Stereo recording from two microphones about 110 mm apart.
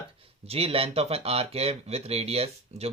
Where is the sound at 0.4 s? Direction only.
60° right (ahead or behind).